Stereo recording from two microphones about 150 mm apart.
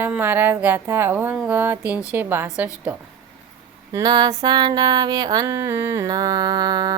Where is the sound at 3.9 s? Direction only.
30° right (ahead or behind).